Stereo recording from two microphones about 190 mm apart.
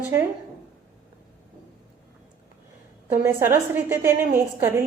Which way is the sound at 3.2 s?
10° right (ahead or behind).